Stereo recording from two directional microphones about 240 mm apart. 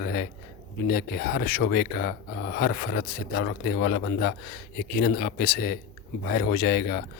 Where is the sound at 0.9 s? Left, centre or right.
Left.